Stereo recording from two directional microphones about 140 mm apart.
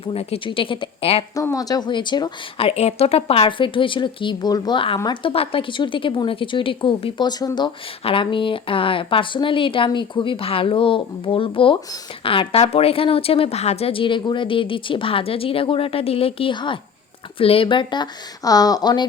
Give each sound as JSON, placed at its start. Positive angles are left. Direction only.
{"t": 0.0, "sound": "speech", "side_deg": 45}
{"t": 1.4, "sound": "speech", "side_deg": 25}